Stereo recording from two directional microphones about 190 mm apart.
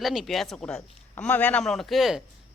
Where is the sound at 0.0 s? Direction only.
Centre (ahead or behind).